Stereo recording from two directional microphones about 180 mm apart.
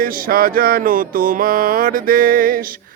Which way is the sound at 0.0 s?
55° right (ahead or behind).